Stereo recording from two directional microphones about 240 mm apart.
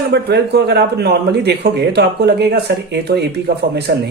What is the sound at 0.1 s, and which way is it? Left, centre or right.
Speech, right.